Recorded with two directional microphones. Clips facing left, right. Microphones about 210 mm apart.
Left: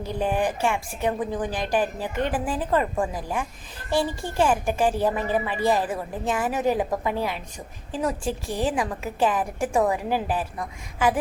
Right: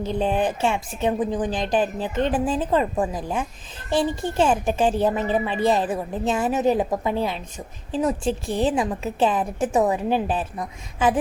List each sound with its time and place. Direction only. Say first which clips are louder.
0.0 s a woman's voice: right 2 dB; 25° right (ahead or behind)